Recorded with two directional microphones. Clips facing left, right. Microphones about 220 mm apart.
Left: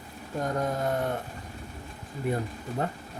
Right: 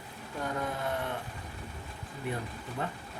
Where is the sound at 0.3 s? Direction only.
40° left (ahead or behind).